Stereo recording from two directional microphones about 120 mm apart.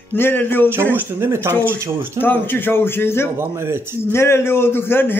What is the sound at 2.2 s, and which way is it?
A man's voice, 15° left (ahead or behind).